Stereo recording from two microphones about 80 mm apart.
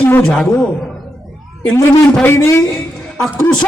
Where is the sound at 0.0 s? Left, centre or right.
Left.